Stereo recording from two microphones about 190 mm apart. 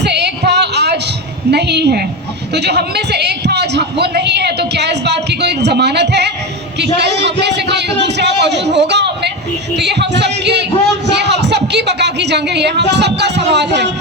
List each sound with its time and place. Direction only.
0.0 s music: 60° right (ahead or behind)
1.5 s a man's voice: 60° right (ahead or behind)